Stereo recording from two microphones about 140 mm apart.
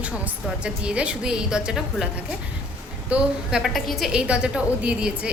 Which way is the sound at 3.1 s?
5° right (ahead or behind).